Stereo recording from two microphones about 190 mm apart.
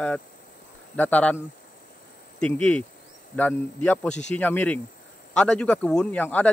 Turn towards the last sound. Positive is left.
turn(degrees=10)  # may be behind; listen again after turning